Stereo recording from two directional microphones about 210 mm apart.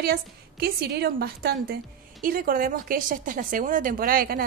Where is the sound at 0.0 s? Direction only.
45° right (ahead or behind).